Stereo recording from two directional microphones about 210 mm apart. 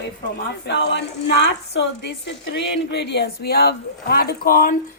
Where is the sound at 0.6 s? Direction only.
55° left (ahead or behind).